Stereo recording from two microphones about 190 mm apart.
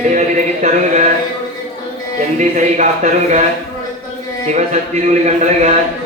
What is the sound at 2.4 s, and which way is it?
Speech, 40° right (ahead or behind).